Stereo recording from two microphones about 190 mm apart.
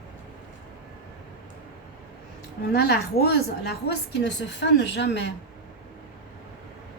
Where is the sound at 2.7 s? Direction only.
60° left (ahead or behind).